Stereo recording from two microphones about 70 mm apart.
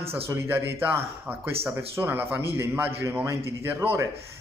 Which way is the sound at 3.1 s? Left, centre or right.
Right.